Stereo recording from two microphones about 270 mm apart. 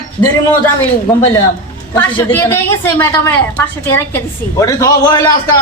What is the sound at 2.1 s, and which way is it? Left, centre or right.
A woman's voice, centre.